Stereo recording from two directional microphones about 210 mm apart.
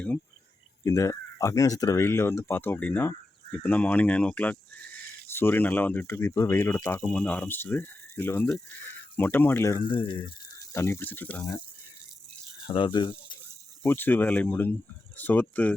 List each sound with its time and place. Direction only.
0.9 s speech: 15° left (ahead or behind)
12.6 s speech: 25° left (ahead or behind)
13.8 s speech: 10° left (ahead or behind)